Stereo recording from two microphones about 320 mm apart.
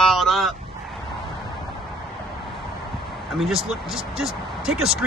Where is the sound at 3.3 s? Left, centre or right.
Centre.